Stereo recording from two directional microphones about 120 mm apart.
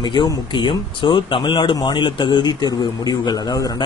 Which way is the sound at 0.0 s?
40° left (ahead or behind).